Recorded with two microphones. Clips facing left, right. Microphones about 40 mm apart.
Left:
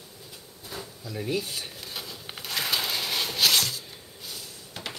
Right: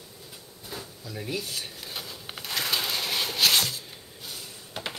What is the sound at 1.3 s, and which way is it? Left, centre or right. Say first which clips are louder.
Speech: left 3 dB; centre.